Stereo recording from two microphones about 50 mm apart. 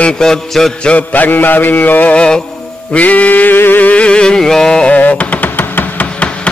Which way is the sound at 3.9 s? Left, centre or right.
Left.